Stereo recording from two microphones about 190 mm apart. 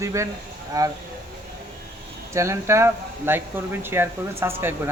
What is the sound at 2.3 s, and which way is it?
Speech, 15° right (ahead or behind).